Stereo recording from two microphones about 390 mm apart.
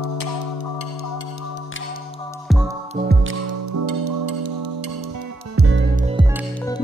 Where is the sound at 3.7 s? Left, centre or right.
Right.